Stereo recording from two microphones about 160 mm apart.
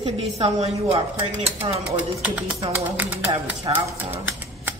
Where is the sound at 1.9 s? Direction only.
10° right (ahead or behind).